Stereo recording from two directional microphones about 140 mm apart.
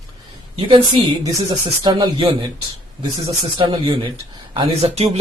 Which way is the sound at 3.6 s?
35° right (ahead or behind).